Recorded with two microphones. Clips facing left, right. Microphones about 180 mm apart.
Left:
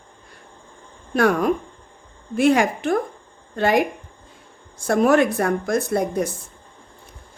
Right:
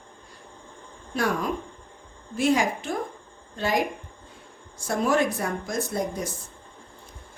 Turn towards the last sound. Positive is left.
turn(degrees=60)  # may be behind; listen again after turning